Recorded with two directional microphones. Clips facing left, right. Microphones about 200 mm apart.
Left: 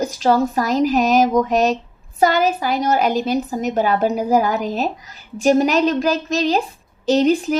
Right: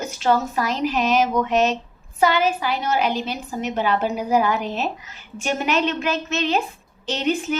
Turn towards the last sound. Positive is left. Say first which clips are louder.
# left 8 dB
turn(degrees=40)  # may be behind; listen again after turning